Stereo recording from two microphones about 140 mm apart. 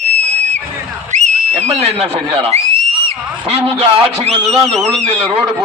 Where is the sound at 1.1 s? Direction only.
60° right (ahead or behind).